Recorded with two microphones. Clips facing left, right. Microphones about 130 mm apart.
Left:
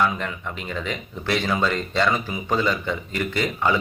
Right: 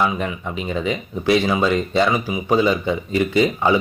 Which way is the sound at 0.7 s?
15° right (ahead or behind).